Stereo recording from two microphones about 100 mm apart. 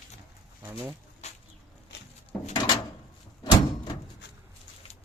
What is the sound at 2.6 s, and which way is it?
Door, 45° left (ahead or behind).